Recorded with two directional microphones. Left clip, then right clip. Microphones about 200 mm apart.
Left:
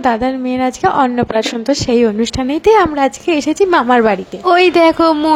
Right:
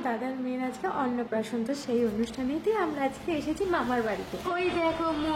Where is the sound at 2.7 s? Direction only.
50° left (ahead or behind).